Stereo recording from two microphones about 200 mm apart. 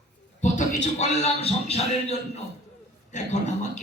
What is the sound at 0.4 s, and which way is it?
A man's voice, 35° left (ahead or behind).